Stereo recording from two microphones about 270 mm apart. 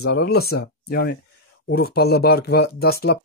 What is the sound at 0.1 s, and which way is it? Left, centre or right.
Speech, left.